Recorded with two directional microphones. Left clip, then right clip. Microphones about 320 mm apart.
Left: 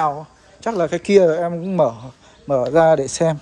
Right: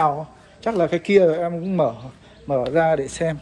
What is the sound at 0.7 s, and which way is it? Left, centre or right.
Speech, centre.